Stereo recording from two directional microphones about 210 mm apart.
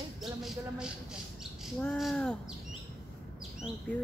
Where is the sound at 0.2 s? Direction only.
Centre (ahead or behind).